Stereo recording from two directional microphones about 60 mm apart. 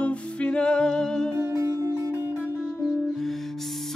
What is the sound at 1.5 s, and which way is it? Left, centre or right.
Music, right.